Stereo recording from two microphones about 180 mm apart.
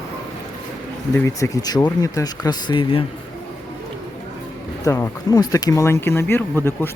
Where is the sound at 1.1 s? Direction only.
15° left (ahead or behind).